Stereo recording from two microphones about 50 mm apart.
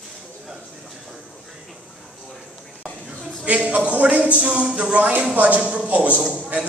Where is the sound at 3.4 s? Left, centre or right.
Right.